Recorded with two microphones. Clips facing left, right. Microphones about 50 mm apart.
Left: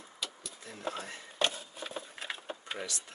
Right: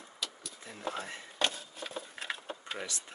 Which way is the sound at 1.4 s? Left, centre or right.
Centre.